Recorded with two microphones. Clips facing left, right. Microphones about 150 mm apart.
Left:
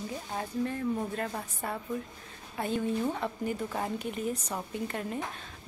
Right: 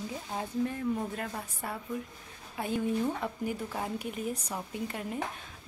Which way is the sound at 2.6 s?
10° right (ahead or behind).